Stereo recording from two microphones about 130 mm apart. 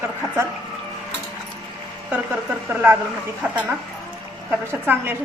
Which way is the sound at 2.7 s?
15° right (ahead or behind).